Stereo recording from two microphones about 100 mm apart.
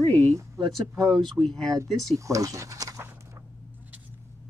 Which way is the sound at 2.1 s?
30° right (ahead or behind).